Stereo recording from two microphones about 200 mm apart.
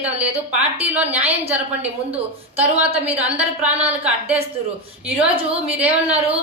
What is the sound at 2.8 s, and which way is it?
Speech, 30° right (ahead or behind).